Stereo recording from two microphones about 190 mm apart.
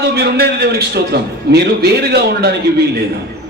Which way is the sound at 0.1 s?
55° right (ahead or behind).